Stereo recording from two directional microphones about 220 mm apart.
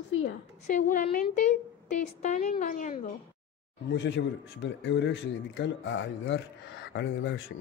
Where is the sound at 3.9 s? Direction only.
55° left (ahead or behind).